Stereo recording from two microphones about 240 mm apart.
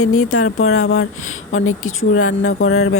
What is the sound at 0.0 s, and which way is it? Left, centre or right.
A woman's voice, left.